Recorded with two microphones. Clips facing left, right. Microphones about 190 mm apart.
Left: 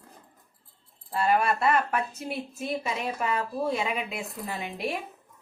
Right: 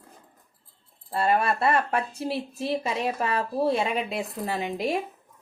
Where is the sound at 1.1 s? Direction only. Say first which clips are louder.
Right 1 dB; 30° right (ahead or behind).